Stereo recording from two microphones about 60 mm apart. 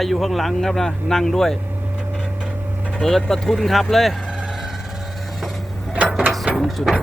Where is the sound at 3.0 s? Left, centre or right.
Centre.